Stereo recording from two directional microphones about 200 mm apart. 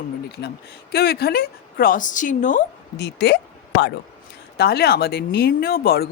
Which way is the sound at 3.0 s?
55° left (ahead or behind).